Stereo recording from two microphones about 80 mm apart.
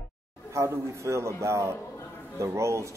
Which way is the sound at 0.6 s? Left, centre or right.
Right.